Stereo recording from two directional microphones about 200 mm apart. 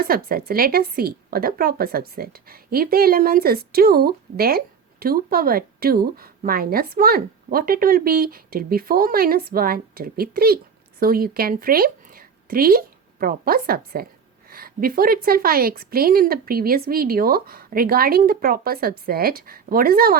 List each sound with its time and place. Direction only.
0.0 s a woman's voice: 45° right (ahead or behind)